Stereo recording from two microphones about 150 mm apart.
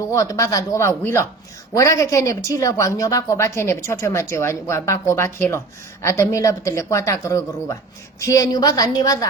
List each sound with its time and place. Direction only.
0.1 s a woman's voice: 20° left (ahead or behind)